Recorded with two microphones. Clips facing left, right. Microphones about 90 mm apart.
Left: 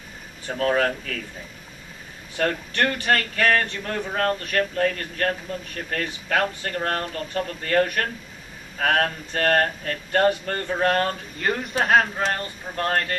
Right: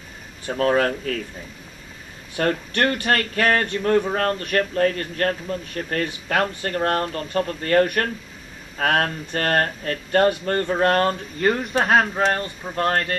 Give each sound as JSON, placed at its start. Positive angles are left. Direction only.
{"t": 0.7, "sound": "speech", "side_deg": -35}
{"t": 2.3, "sound": "speech", "side_deg": -40}